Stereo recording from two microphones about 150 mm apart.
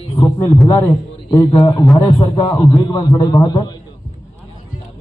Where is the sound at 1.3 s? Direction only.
25° left (ahead or behind).